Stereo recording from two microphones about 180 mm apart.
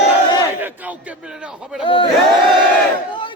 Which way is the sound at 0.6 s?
10° right (ahead or behind).